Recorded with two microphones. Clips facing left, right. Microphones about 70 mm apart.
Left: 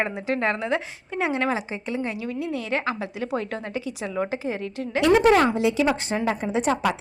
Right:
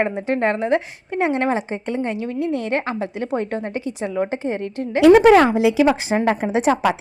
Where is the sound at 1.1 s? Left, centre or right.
Right.